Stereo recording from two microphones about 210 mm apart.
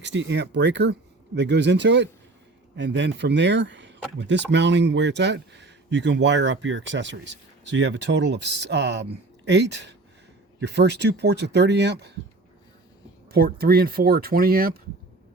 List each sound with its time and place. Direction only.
0.0 s speech: 60° right (ahead or behind)
13.3 s speech: 45° right (ahead or behind)